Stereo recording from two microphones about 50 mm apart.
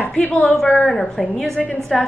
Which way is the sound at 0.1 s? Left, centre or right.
Left.